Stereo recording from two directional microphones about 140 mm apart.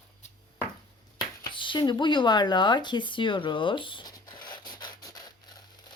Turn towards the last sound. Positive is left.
turn(degrees=30)  # may be behind; listen again after turning